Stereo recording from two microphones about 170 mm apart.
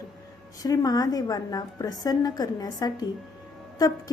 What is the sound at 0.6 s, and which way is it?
A woman's voice, 20° left (ahead or behind).